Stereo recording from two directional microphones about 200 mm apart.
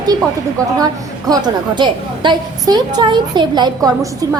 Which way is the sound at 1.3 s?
20° right (ahead or behind).